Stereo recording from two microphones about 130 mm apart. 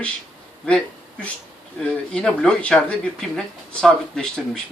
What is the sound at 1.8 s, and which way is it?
Speech, 5° left (ahead or behind).